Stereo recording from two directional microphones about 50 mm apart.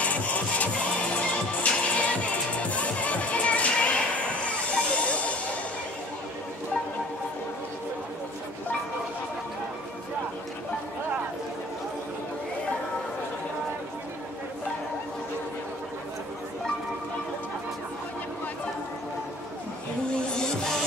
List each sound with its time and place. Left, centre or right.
0.0 s music: left
4.5 s hiss: left
20.2 s music: centre